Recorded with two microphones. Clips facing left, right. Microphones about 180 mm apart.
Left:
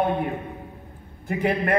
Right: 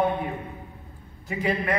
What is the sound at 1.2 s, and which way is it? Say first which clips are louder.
Speech: left 3 dB; 60° left (ahead or behind).